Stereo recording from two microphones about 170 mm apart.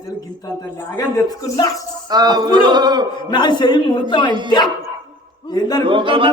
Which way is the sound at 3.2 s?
25° left (ahead or behind).